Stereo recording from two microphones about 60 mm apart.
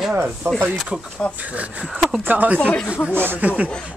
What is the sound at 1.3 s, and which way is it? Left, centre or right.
Speech, right.